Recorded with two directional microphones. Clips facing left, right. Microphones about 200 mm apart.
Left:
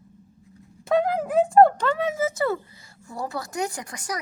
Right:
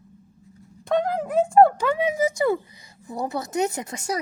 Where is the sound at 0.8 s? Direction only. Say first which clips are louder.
Left 1 dB; 5° left (ahead or behind); by 4.2 s 25° right (ahead or behind).